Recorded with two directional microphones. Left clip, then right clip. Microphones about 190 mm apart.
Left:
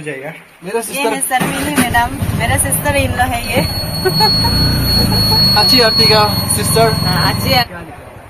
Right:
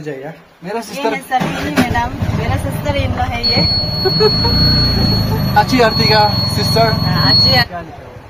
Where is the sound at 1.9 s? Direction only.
25° left (ahead or behind).